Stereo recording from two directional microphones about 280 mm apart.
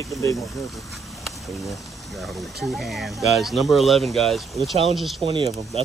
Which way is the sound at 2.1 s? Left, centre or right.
Centre.